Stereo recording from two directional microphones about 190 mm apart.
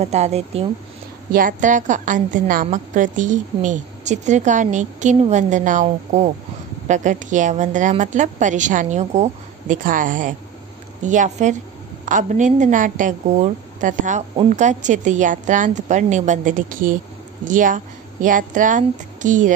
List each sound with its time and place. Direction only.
0.0 s a woman's voice: 35° right (ahead or behind)
1.3 s a woman's voice: 45° right (ahead or behind)